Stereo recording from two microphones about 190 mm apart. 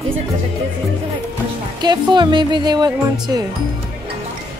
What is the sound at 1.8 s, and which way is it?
Speech, 20° right (ahead or behind).